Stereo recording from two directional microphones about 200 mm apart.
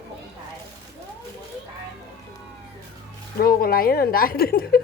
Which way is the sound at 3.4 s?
50° left (ahead or behind).